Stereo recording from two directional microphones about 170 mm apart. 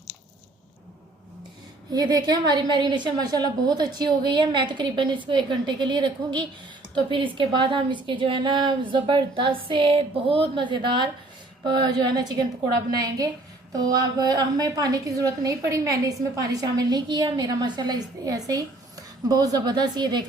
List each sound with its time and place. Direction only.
1.9 s a woman's voice: 20° right (ahead or behind)